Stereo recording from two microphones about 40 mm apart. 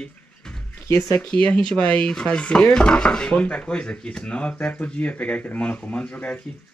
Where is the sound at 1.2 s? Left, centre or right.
Left.